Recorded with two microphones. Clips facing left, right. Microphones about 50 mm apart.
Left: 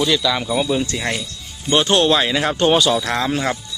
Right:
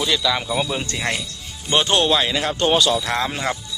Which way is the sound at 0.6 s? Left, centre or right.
Centre.